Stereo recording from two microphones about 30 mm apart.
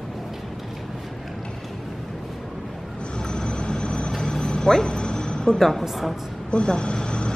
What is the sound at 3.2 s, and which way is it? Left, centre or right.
Vehicle, left.